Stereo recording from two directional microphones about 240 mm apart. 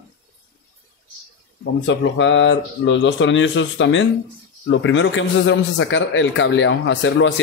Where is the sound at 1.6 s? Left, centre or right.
Left.